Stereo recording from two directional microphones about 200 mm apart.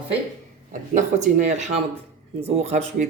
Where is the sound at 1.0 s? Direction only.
35° right (ahead or behind).